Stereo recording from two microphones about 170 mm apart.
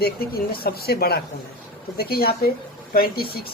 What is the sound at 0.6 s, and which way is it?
Speech, 65° left (ahead or behind).